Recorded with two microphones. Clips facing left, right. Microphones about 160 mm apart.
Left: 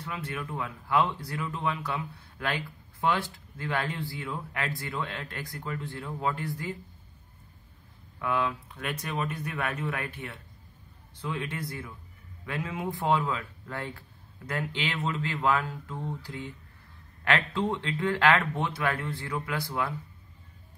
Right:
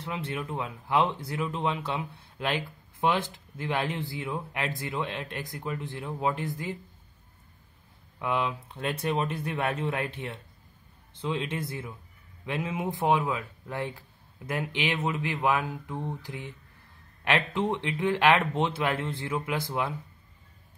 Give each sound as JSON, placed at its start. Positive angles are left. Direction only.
{"t": 0.0, "sound": "speech", "side_deg": -25}
{"t": 8.2, "sound": "speech", "side_deg": -20}